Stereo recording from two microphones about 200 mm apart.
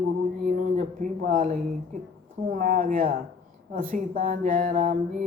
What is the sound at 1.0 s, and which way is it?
Speech, 40° right (ahead or behind).